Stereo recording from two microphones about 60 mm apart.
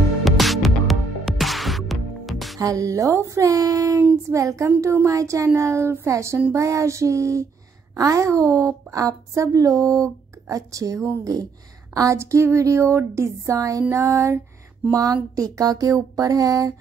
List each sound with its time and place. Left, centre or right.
0.2 s music: centre
2.6 s a woman's voice: right
4.3 s a sound: right
7.9 s a woman's voice: right
12.2 s a sound: right
13.8 s music: right
14.9 s a woman's voice: right